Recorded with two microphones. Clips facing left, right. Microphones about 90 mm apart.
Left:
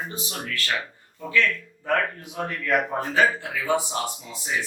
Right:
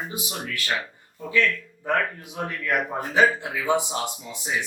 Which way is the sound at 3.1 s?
20° right (ahead or behind).